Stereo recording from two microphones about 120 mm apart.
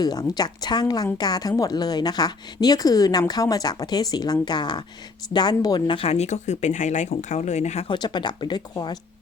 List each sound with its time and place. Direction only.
0.0 s a woman's voice: 35° left (ahead or behind)
6.0 s speech: 60° left (ahead or behind)
7.9 s a woman's voice: 40° left (ahead or behind)